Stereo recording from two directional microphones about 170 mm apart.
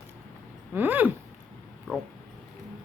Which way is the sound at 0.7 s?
10° right (ahead or behind).